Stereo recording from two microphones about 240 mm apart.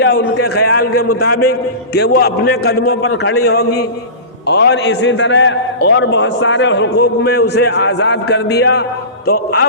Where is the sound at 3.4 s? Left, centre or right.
Left.